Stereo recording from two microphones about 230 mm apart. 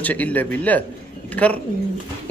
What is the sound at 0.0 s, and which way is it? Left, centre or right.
A man's voice, centre.